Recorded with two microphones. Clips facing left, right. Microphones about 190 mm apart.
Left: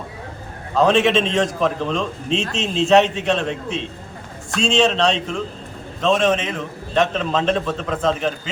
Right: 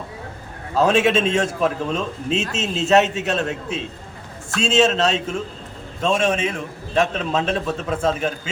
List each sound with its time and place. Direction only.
0.8 s a man's voice: 5° right (ahead or behind)